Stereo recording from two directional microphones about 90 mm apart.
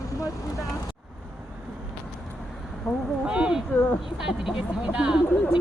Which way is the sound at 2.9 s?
35° left (ahead or behind).